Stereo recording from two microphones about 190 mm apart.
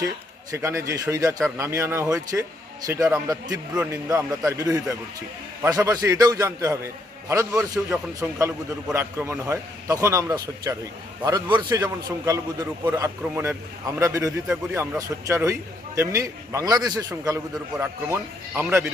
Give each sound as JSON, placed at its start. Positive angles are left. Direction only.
{"t": 0.5, "sound": "a man's voice", "side_deg": -15}